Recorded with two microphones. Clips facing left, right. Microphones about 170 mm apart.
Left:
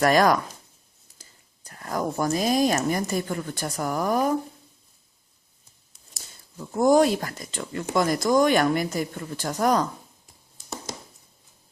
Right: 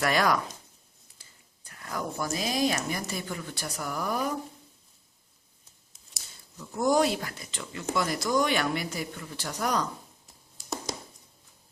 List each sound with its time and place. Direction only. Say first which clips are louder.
0.0 s speech: left 6 dB; 45° left (ahead or behind)
6.6 s speech: left 6 dB; 50° left (ahead or behind)